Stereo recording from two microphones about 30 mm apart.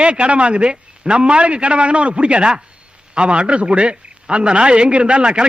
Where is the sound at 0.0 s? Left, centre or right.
Right.